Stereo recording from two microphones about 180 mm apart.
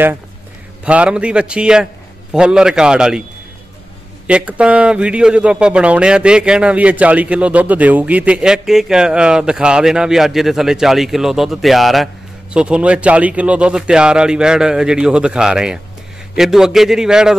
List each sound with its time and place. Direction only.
0.8 s a man's voice: 5° right (ahead or behind)
4.3 s a man's voice: 5° right (ahead or behind)